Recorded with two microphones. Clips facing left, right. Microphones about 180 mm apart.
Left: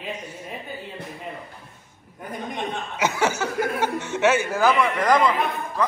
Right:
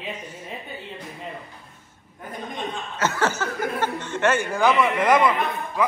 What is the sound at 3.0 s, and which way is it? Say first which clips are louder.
Speech: left 1 dB; 10° left (ahead or behind).